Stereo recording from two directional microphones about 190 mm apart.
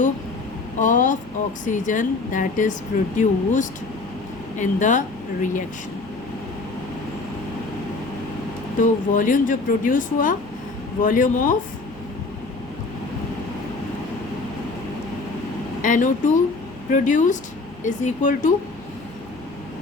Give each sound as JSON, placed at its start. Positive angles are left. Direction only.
{"t": 0.8, "sound": "speech", "side_deg": 40}
{"t": 8.8, "sound": "speech", "side_deg": 45}
{"t": 15.8, "sound": "speech", "side_deg": 45}